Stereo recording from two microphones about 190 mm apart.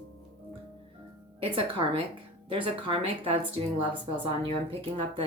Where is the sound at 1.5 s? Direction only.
30° right (ahead or behind).